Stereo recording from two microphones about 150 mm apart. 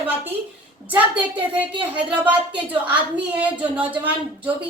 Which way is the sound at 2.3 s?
10° right (ahead or behind).